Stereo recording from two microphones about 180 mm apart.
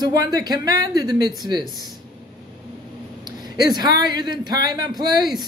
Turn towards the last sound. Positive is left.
turn(degrees=-25)  # may be behind; listen again after turning